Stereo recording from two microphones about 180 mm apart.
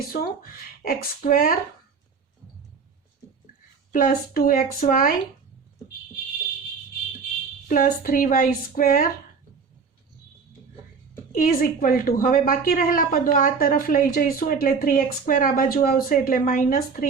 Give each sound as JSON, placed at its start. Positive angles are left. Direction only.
{"t": 0.1, "sound": "a woman's voice", "side_deg": 55}
{"t": 3.9, "sound": "a woman's voice", "side_deg": 50}
{"t": 7.7, "sound": "a woman's voice", "side_deg": 50}
{"t": 11.3, "sound": "a woman's voice", "side_deg": 50}